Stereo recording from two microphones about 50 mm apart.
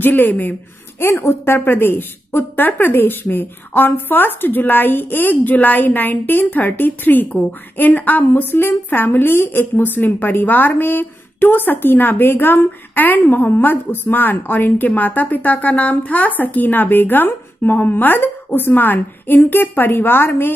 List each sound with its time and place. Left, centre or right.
0.0 s a woman's voice: left